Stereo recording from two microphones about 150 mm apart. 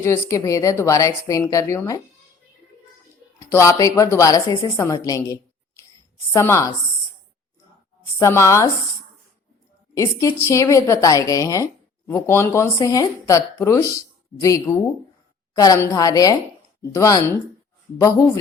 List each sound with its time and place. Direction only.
0.0 s speech: 20° left (ahead or behind)
3.5 s speech: 20° left (ahead or behind)
8.2 s speech: 20° left (ahead or behind)
9.9 s speech: 20° left (ahead or behind)